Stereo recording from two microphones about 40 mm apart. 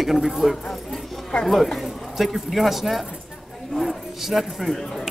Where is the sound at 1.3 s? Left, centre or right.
Left.